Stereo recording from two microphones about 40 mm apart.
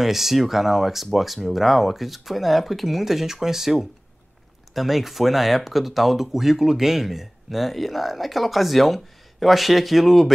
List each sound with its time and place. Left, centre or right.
0.0 s speech: centre